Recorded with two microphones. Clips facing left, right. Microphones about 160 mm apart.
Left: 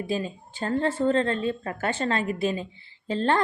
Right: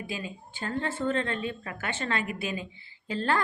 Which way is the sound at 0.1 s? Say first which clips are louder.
Left 8 dB; 35° left (ahead or behind).